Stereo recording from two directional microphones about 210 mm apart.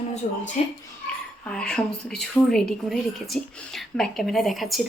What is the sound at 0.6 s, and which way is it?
Speech, 30° left (ahead or behind).